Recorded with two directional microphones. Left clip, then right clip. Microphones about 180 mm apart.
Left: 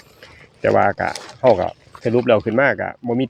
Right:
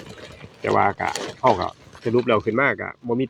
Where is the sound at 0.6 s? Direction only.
40° left (ahead or behind).